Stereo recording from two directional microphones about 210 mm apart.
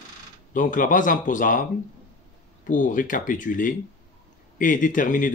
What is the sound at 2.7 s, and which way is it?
Speech, 40° left (ahead or behind).